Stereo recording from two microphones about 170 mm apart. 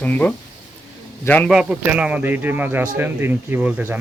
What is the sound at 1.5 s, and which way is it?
Speech, 5° right (ahead or behind).